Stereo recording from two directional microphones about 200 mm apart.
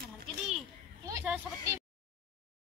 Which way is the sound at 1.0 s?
15° right (ahead or behind).